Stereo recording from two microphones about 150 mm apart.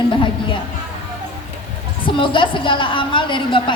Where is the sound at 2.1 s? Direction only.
35° left (ahead or behind).